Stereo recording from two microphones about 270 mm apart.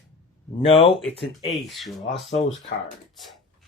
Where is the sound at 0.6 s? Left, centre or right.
Centre.